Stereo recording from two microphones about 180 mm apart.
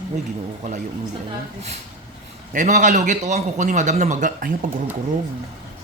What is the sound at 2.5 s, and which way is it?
A man's voice, 45° right (ahead or behind).